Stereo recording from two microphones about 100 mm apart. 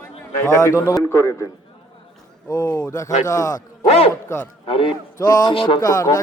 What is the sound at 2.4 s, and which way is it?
Speech, 35° left (ahead or behind).